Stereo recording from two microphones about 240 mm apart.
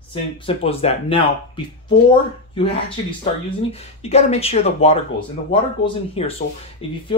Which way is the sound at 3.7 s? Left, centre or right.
Left.